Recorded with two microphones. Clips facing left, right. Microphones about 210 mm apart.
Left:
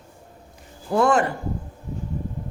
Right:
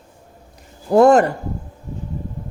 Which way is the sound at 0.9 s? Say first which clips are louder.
Right 8 dB; 40° right (ahead or behind).